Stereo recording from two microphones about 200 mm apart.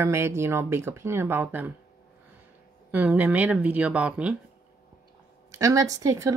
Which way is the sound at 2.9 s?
10° right (ahead or behind).